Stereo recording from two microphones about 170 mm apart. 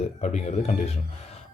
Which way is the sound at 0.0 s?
40° left (ahead or behind).